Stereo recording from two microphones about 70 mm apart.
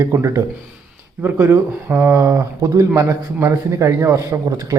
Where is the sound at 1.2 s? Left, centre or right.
Right.